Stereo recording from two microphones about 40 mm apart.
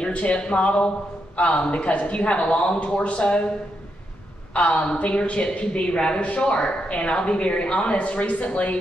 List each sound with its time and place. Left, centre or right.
0.1 s a man's voice: left
4.6 s speech: left